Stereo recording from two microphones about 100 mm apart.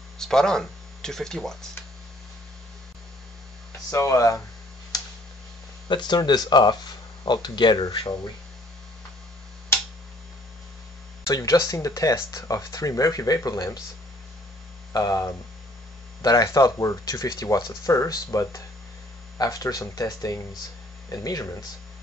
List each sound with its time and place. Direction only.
0.2 s speech: 5° left (ahead or behind)
3.9 s speech: 30° left (ahead or behind)
4.9 s tick: 40° left (ahead or behind)
5.9 s speech: 50° left (ahead or behind)
11.2 s speech: 40° left (ahead or behind)
14.9 s speech: 35° left (ahead or behind)